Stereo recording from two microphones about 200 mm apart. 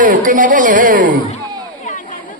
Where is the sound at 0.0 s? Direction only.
40° right (ahead or behind).